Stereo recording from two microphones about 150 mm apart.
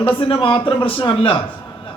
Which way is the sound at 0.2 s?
35° left (ahead or behind).